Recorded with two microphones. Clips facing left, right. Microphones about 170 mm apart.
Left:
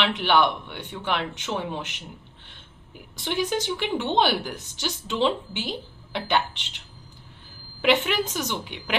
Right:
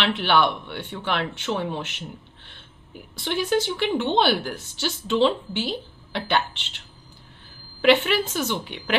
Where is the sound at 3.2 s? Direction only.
15° left (ahead or behind).